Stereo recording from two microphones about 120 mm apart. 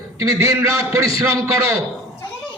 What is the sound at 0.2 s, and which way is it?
Speech, 20° right (ahead or behind).